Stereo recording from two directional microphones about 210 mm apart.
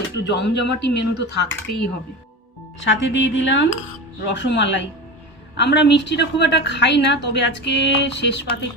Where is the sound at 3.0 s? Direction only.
60° left (ahead or behind).